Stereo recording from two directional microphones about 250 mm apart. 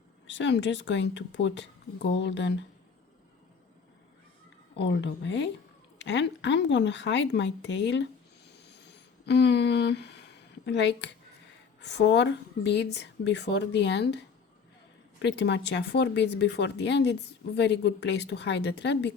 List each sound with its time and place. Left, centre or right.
0.3 s speech: left
4.8 s speech: left
9.2 s speech: left